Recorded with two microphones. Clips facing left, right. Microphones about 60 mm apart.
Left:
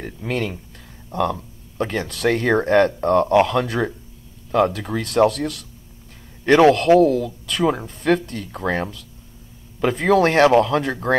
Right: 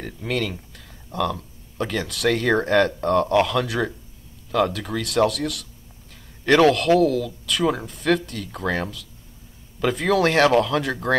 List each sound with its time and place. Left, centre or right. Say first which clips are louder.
0.3 s speech: left 1 dB; left